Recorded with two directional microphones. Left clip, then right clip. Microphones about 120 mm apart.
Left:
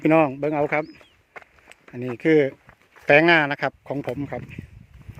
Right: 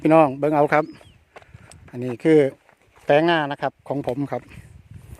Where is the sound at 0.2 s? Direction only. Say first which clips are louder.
Right 4 dB; 30° right (ahead or behind); by 0.9 s 45° right (ahead or behind).